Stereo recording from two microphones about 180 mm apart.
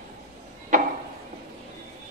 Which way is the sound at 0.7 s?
40° right (ahead or behind).